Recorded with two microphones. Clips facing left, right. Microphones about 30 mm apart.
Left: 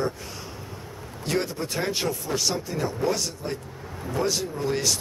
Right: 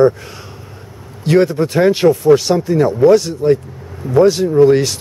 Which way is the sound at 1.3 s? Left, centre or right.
Right.